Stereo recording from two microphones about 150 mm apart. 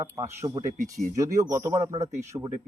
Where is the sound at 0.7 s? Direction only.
55° right (ahead or behind).